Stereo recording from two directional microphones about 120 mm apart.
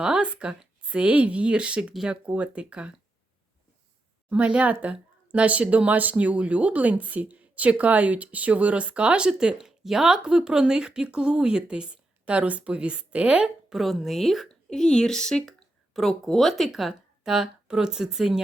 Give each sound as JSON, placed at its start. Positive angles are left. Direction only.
{"t": 0.0, "sound": "speech", "side_deg": -5}
{"t": 4.3, "sound": "speech", "side_deg": -10}